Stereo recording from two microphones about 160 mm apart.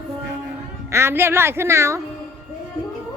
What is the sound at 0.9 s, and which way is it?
A woman's voice, 15° right (ahead or behind).